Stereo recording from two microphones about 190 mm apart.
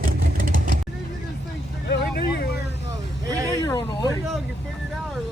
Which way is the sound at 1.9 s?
60° left (ahead or behind).